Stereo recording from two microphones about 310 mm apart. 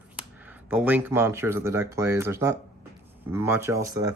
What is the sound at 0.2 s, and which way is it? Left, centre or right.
Speech, centre.